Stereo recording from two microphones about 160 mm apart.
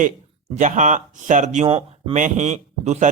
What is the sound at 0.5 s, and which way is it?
Speech, 50° right (ahead or behind).